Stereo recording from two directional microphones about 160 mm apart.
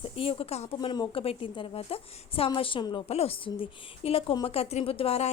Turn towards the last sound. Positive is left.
turn(degrees=40)  # may be behind; listen again after turning